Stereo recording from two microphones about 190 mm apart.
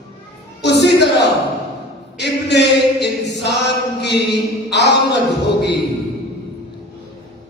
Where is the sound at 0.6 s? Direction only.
60° left (ahead or behind).